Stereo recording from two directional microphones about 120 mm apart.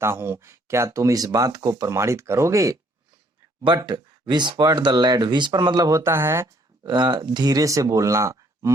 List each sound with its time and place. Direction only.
0.0 s speech: 20° right (ahead or behind)
3.8 s speech: 40° right (ahead or behind); by 6.5 s 20° right (ahead or behind)
6.8 s speech: 40° right (ahead or behind)